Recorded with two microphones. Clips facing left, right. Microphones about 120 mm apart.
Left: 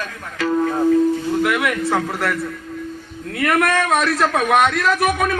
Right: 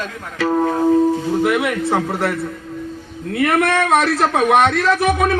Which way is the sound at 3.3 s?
25° right (ahead or behind).